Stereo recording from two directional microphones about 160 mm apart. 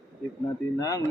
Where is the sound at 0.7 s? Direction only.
20° left (ahead or behind).